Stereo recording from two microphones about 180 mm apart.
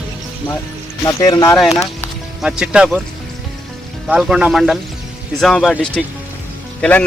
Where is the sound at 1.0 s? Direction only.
20° left (ahead or behind).